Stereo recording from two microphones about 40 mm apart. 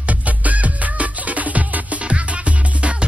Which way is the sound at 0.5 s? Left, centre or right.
Right.